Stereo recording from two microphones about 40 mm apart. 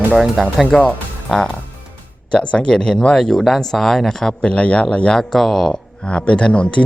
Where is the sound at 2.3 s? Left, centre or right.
Left; by 4.4 s centre.